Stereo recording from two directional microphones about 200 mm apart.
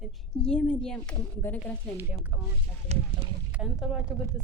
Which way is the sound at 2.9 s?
30° right (ahead or behind).